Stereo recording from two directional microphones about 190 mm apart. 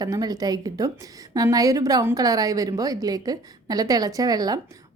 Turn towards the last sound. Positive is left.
turn(degrees=-20)  # may be behind; listen again after turning